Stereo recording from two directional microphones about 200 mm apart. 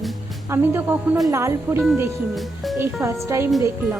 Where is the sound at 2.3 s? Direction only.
Centre (ahead or behind).